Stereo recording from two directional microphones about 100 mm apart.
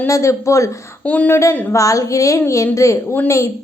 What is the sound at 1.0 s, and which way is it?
Speech, 15° left (ahead or behind).